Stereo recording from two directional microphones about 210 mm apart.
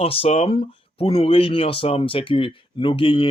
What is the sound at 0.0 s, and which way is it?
Speech, 25° left (ahead or behind).